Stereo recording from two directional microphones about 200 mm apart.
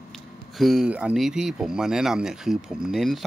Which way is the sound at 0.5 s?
Centre (ahead or behind).